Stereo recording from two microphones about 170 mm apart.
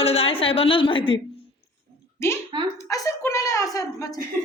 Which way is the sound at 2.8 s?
20° left (ahead or behind).